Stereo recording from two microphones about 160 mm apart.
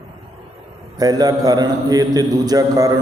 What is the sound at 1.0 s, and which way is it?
A man's voice, 25° right (ahead or behind).